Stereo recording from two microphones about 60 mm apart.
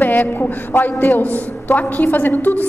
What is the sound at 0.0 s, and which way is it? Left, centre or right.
A man's voice, left.